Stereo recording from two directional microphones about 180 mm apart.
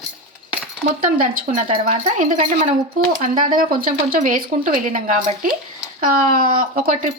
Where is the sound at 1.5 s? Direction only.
50° right (ahead or behind).